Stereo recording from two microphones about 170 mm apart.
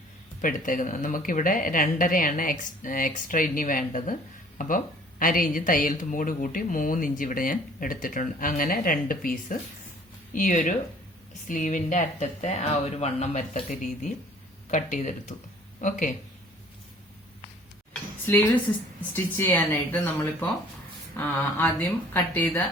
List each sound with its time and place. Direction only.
0.4 s speech: 50° left (ahead or behind)
5.2 s speech: 55° left (ahead or behind)
18.3 s speech: 10° left (ahead or behind)
21.2 s speech: 10° left (ahead or behind)